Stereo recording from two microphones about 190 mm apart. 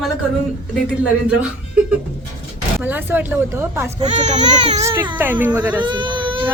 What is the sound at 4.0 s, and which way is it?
Speech, 35° right (ahead or behind).